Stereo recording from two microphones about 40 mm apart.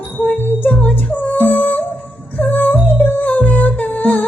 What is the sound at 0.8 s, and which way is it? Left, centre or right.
Music, left.